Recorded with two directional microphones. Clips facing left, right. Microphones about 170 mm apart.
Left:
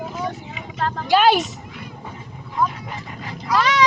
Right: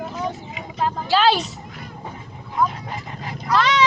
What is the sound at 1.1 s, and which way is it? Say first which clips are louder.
Speech: left 3 dB; 15° left (ahead or behind).